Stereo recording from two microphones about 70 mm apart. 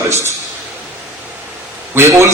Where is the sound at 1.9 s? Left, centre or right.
Right.